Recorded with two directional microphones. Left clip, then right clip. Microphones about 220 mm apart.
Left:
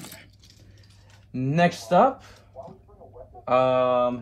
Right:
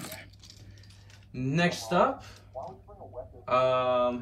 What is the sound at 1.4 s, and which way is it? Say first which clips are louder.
Speech: left 6 dB; 25° left (ahead or behind).